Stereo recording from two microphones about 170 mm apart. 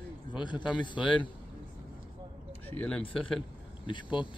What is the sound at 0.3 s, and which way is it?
Speech, 25° left (ahead or behind).